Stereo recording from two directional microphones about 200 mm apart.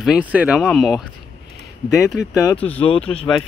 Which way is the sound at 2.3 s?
20° left (ahead or behind).